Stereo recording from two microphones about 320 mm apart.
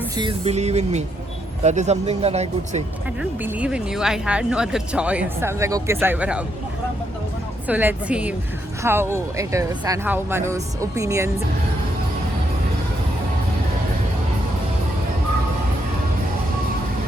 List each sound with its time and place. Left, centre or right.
0.2 s speech: centre
3.2 s speech: centre
7.7 s speech: centre